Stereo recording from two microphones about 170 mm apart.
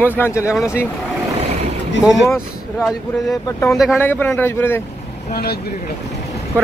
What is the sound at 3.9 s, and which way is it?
Speech, 10° left (ahead or behind).